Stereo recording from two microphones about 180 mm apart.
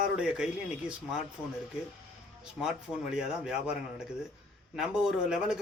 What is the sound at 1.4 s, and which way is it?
Speech, 10° left (ahead or behind).